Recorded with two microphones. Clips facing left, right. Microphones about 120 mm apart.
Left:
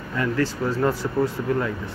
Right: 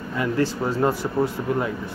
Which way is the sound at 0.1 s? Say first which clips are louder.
Right 1 dB; 15° right (ahead or behind).